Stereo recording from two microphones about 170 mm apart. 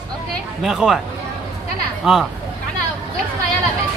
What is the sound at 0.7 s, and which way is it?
Speech, centre (ahead or behind).